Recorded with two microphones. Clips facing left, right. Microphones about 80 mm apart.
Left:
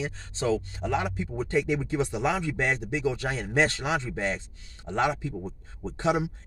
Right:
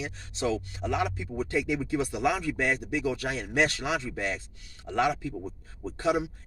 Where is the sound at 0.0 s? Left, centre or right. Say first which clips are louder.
Left 1 dB; left.